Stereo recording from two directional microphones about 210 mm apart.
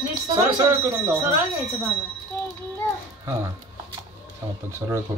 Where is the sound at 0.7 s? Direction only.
10° right (ahead or behind).